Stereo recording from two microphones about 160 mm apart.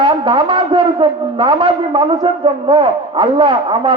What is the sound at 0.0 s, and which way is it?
A man's voice, 30° right (ahead or behind).